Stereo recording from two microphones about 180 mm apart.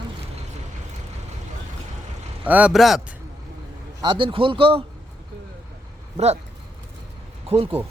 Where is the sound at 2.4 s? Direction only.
10° right (ahead or behind).